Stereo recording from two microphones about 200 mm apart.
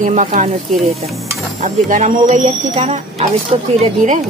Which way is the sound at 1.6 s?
35° right (ahead or behind).